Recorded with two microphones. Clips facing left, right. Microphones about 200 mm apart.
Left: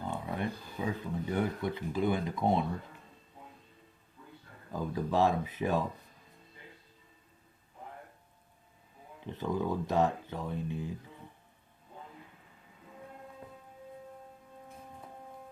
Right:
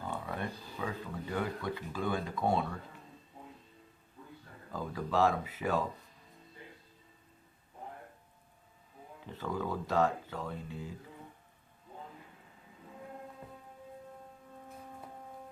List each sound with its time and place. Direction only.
0.0 s a sound: 20° left (ahead or behind)
0.8 s speech: 20° left (ahead or behind)
4.7 s speech: 20° left (ahead or behind)
9.2 s speech: 20° left (ahead or behind)